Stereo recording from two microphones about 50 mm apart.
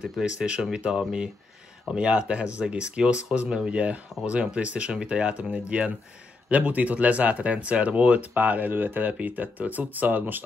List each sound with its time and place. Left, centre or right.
0.2 s speech: centre; by 10.4 s right